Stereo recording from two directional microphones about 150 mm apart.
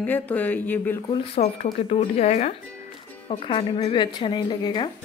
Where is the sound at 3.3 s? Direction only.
35° left (ahead or behind).